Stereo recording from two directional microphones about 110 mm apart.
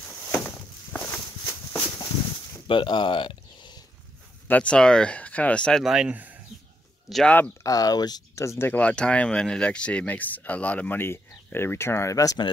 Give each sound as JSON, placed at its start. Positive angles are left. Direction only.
{"t": 0.5, "sound": "walk", "side_deg": 5}
{"t": 1.4, "sound": "a sound", "side_deg": 30}
{"t": 2.7, "sound": "a sound", "side_deg": 50}
{"t": 4.5, "sound": "speech", "side_deg": 10}
{"t": 5.9, "sound": "speech", "side_deg": -10}
{"t": 7.2, "sound": "speech", "side_deg": 10}
{"t": 7.6, "sound": "speech", "side_deg": 35}